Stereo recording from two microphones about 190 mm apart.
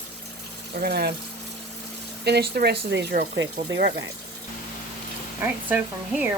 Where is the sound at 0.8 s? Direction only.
55° right (ahead or behind).